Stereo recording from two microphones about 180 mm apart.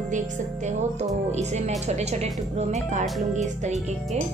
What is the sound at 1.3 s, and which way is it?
Speech, 40° right (ahead or behind).